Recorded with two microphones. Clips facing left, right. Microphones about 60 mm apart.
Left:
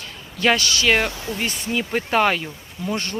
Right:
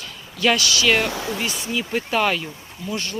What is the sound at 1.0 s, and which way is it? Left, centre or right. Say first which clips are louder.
Speech: right 3 dB; right.